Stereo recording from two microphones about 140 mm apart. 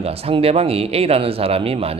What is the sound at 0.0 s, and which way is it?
Speech, 45° right (ahead or behind).